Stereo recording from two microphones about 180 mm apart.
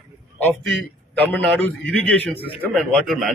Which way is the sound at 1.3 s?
10° left (ahead or behind).